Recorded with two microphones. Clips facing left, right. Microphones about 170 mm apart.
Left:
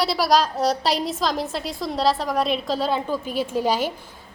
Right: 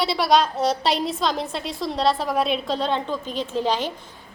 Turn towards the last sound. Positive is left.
turn(degrees=10)  # may be behind; listen again after turning